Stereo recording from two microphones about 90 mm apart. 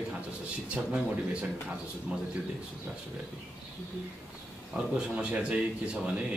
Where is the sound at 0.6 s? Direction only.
15° right (ahead or behind).